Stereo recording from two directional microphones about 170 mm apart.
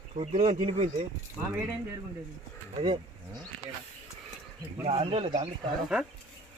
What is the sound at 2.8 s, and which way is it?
Speech, 35° right (ahead or behind).